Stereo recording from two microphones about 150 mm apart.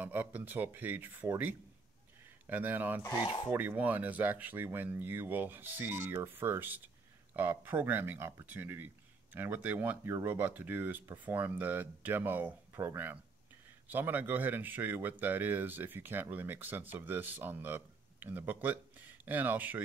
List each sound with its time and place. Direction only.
0.0 s speech: 15° right (ahead or behind)
3.0 s speech: 25° left (ahead or behind)
3.5 s speech: 10° right (ahead or behind)